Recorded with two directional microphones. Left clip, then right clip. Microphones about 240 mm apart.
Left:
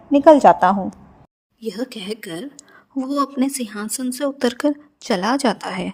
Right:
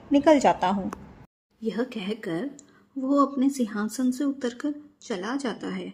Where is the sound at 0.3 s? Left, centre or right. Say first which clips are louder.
Left 10 dB; left.